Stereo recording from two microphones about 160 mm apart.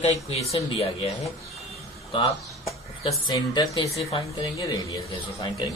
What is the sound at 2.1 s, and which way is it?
Speech, 35° left (ahead or behind).